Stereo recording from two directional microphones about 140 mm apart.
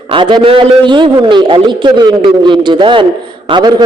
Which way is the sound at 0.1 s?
35° right (ahead or behind).